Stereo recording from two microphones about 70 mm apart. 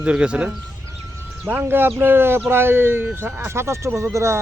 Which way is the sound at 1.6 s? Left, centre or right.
Right.